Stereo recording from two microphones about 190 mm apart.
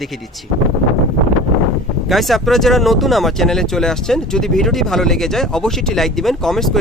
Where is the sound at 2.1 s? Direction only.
Centre (ahead or behind).